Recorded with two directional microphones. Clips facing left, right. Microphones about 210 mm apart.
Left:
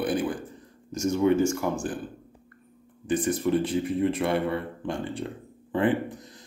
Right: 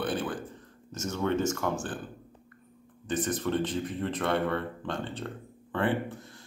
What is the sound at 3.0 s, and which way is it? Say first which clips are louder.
Speech: left 5 dB; 10° left (ahead or behind).